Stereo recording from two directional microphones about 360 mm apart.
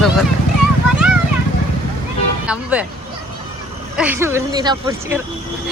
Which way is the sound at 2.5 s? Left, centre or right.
Centre.